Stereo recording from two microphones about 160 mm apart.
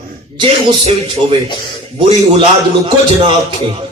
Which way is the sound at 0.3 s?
35° right (ahead or behind).